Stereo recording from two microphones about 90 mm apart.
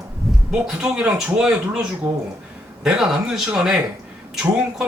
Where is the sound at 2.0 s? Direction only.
20° right (ahead or behind).